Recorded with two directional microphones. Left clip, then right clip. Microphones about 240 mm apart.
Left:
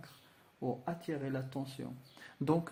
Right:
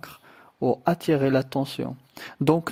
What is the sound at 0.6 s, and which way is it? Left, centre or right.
Speech, right.